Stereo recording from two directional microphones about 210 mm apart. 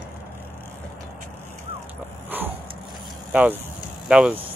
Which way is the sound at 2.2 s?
10° right (ahead or behind).